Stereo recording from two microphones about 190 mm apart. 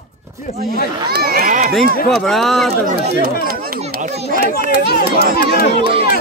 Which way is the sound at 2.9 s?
50° right (ahead or behind).